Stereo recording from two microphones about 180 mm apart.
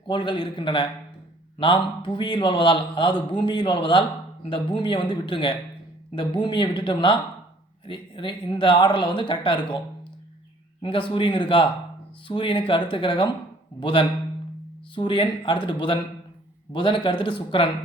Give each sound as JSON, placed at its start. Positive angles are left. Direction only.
{"t": 0.1, "sound": "a man's voice", "side_deg": 25}
{"t": 10.8, "sound": "a man's voice", "side_deg": 30}